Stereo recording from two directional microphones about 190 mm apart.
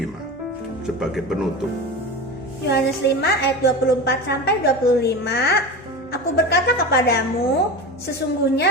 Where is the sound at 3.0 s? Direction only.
60° left (ahead or behind).